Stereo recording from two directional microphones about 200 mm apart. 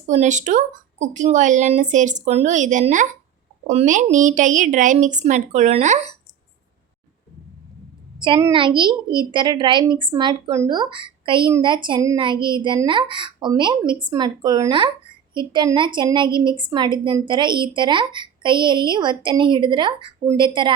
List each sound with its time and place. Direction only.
0.1 s speech: 35° right (ahead or behind)
8.2 s a woman's voice: 20° right (ahead or behind)